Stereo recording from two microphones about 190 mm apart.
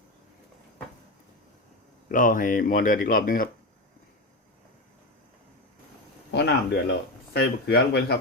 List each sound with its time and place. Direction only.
2.0 s speech: 45° left (ahead or behind)
6.3 s speech: 60° left (ahead or behind)